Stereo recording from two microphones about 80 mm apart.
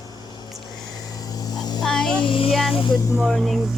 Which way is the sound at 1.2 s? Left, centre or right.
Left.